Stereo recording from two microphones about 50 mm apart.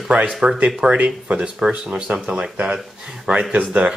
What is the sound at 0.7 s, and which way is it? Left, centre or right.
Speech, centre.